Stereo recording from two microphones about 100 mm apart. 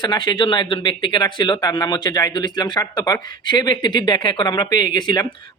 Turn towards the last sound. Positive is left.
turn(degrees=45)  # may be behind; listen again after turning